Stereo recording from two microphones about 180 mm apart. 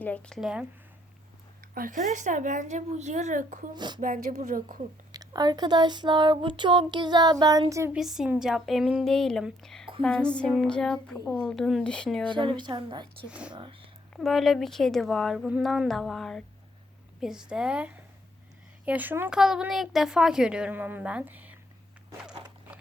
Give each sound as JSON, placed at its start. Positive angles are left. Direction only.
{"t": 0.0, "sound": "a woman's voice", "side_deg": 5}
{"t": 1.7, "sound": "speech", "side_deg": -50}
{"t": 3.8, "sound": "speech", "side_deg": -25}
{"t": 4.0, "sound": "speech", "side_deg": -45}
{"t": 5.1, "sound": "speech", "side_deg": -20}
{"t": 7.9, "sound": "a woman's voice", "side_deg": 0}
{"t": 12.3, "sound": "speech", "side_deg": -25}
{"t": 13.2, "sound": "a woman's voice", "side_deg": -5}
{"t": 13.5, "sound": "speech", "side_deg": -30}
{"t": 14.2, "sound": "a woman's voice", "side_deg": 0}